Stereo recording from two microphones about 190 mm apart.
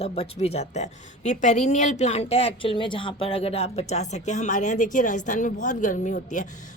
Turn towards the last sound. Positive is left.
turn(degrees=40)  # may be behind; listen again after turning